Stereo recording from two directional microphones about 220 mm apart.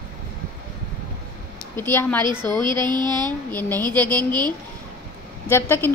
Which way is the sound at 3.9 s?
5° left (ahead or behind).